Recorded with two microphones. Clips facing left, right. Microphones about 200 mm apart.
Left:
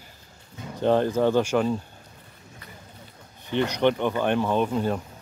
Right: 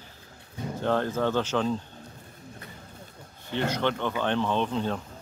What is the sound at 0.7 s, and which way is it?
Speech, 15° left (ahead or behind).